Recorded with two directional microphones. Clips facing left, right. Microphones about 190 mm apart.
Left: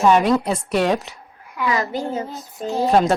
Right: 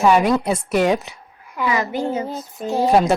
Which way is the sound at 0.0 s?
Centre (ahead or behind).